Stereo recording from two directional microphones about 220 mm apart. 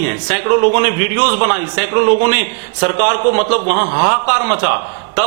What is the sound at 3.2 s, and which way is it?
Speech, 35° right (ahead or behind).